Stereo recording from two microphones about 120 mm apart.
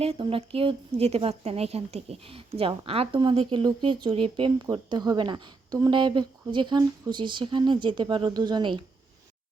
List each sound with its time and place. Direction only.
0.0 s a woman's voice: 50° right (ahead or behind)
3.3 s a woman's voice: 40° right (ahead or behind)